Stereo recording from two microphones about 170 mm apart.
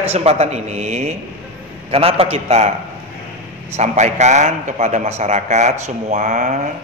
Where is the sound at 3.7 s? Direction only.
40° right (ahead or behind).